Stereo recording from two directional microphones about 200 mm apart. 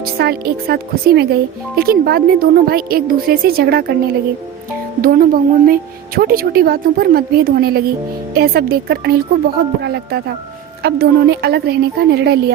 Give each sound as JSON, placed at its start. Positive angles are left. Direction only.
{"t": 0.0, "sound": "speech", "side_deg": -50}
{"t": 4.9, "sound": "a woman's voice", "side_deg": -45}